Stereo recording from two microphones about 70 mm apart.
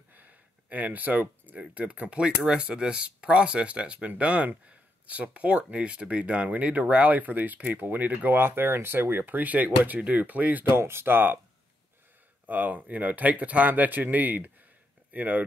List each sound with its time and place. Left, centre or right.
0.1 s a sound: right
1.5 s speech: centre
10.7 s speech: right
12.4 s speech: right